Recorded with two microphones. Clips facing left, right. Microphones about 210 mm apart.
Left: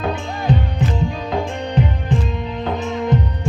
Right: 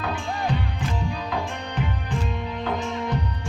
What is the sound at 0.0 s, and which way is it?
Music, 25° left (ahead or behind).